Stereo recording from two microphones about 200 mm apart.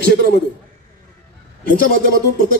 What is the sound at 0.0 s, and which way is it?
Speech, 55° left (ahead or behind).